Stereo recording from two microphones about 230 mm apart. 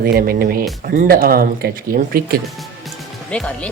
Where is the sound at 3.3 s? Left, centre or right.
Centre.